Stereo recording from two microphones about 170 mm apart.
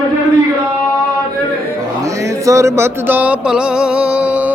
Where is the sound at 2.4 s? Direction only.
20° right (ahead or behind).